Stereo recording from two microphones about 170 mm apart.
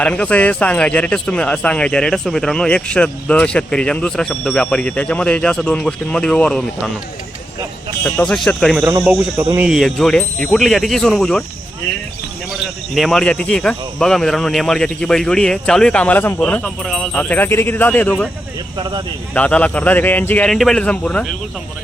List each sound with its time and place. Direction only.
0.0 s speech: 5° left (ahead or behind)
8.0 s speech: 10° left (ahead or behind)
8.8 s speech: 10° right (ahead or behind)
12.9 s speech: centre (ahead or behind)
18.8 s speech: 25° right (ahead or behind)
19.3 s speech: 10° left (ahead or behind)